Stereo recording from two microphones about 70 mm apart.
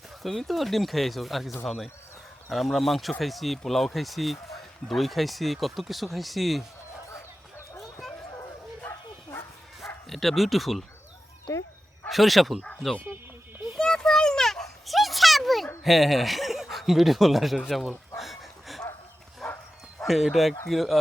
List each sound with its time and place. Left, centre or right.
0.2 s speech: centre
8.9 s bow-wow: left
9.8 s speech: centre
11.5 s speech: left
12.0 s speech: centre
13.7 s a sound: centre
15.8 s speech: centre
18.2 s a sound: centre
19.4 s bow-wow: centre
20.1 s speech: centre